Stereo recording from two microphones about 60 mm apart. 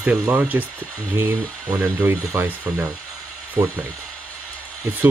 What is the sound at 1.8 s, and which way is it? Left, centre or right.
Speech, right.